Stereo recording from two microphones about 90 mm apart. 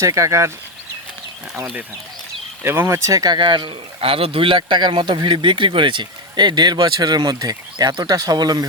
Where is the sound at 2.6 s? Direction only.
30° right (ahead or behind); by 8.6 s 45° right (ahead or behind).